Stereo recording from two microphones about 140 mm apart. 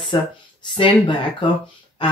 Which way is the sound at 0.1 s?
35° left (ahead or behind).